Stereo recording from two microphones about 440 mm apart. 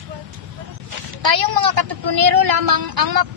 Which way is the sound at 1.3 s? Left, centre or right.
Right.